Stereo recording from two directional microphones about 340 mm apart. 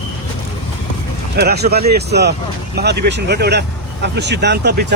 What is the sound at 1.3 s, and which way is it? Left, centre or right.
Speech, right.